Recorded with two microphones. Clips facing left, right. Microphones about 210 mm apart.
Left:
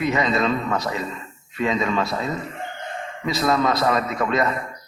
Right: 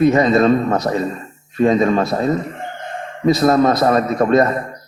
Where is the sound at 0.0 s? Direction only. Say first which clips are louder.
Right 9 dB; 45° right (ahead or behind).